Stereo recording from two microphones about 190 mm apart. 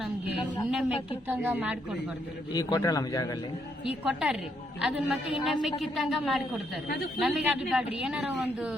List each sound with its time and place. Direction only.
0.7 s a woman's voice: 5° right (ahead or behind)
2.5 s a man's voice: 20° left (ahead or behind)
3.8 s a woman's voice: 5° right (ahead or behind)
6.8 s a woman's voice: 55° left (ahead or behind)
7.2 s a woman's voice: centre (ahead or behind)